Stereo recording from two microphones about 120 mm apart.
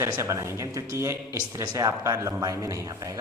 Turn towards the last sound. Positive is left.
turn(degrees=-25)  # may be behind; listen again after turning